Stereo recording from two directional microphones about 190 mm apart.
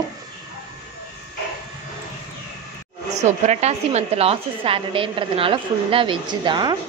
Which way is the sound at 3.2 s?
35° right (ahead or behind).